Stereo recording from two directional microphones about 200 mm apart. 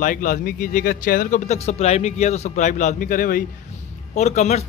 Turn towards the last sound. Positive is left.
turn(degrees=35)  # may be behind; listen again after turning